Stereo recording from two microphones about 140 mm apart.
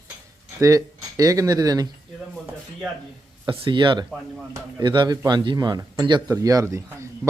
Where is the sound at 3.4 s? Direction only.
35° right (ahead or behind).